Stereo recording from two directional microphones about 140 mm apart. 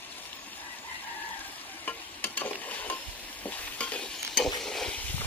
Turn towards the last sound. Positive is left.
turn(degrees=5)  # may be behind; listen again after turning